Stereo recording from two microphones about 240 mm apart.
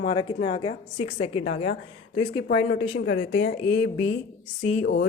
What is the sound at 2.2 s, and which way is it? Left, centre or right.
Speech, left.